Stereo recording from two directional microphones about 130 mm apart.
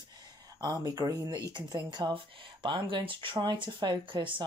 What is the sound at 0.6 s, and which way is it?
Speech, 35° right (ahead or behind).